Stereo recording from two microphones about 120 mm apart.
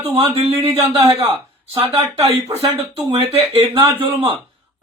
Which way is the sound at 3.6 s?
50° right (ahead or behind).